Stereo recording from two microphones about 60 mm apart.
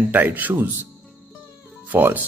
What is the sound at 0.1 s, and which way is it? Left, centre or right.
Speech, right.